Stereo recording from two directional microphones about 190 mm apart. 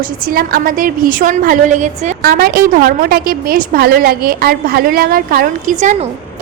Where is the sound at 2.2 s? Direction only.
55° right (ahead or behind).